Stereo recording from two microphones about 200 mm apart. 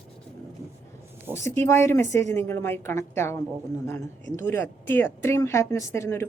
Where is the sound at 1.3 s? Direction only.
15° left (ahead or behind).